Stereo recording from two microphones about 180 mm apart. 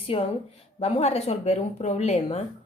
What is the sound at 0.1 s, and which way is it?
Speech, 30° left (ahead or behind).